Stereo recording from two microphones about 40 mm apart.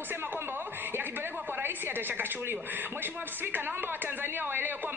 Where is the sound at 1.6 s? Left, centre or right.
Right.